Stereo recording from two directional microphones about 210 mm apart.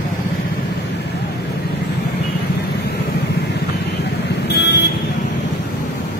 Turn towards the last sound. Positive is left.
turn(degrees=55)  # may be behind; listen again after turning